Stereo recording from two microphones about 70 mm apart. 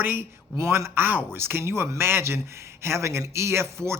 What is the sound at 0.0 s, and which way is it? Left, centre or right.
Speech, right.